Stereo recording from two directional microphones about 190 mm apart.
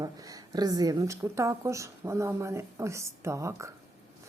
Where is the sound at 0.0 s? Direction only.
20° right (ahead or behind).